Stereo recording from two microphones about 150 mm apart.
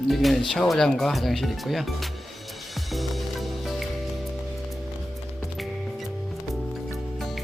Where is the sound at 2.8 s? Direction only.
Centre (ahead or behind).